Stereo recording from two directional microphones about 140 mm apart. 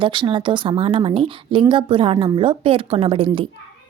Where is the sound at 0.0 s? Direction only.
35° right (ahead or behind).